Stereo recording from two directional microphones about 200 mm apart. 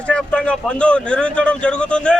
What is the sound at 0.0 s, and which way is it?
A man's voice, 5° left (ahead or behind).